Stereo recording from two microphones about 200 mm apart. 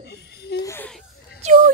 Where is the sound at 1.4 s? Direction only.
35° right (ahead or behind).